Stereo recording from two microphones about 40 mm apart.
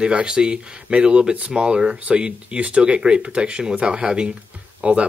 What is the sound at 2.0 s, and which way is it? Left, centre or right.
Speech, right.